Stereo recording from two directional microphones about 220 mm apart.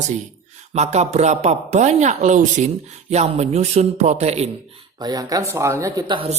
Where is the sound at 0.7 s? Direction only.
30° right (ahead or behind).